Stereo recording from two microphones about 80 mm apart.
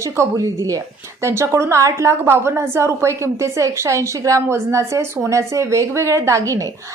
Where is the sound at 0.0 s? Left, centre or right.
Right.